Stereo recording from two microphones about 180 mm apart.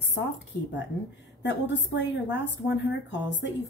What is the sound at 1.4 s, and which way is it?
A woman's voice, 80° left.